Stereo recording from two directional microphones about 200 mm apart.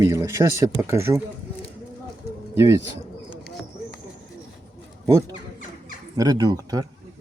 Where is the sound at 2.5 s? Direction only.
15° right (ahead or behind).